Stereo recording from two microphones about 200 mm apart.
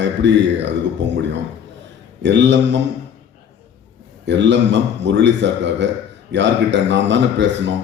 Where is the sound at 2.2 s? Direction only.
60° right (ahead or behind).